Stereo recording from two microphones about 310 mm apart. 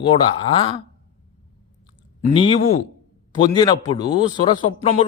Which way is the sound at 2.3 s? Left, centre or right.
Centre.